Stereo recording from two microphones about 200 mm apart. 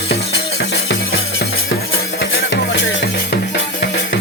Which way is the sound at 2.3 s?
60° left (ahead or behind).